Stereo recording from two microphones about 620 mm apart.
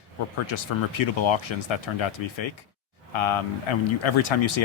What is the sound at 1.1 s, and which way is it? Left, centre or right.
Speech, left.